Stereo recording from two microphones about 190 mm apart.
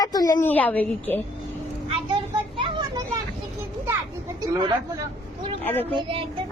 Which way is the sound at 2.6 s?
25° right (ahead or behind).